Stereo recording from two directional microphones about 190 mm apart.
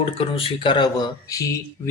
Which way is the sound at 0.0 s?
30° left (ahead or behind).